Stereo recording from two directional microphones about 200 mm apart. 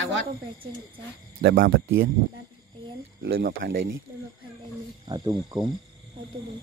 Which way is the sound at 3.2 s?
70° right (ahead or behind).